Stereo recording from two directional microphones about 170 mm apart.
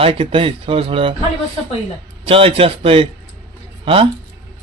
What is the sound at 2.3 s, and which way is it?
Speech, 35° right (ahead or behind).